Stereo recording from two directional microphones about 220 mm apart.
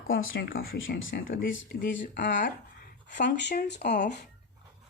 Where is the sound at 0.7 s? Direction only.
60° left (ahead or behind).